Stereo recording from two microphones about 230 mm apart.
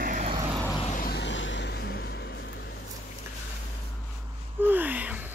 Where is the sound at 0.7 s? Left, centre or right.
Left.